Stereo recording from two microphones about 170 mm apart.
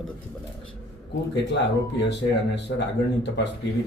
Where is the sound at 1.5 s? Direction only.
90° left.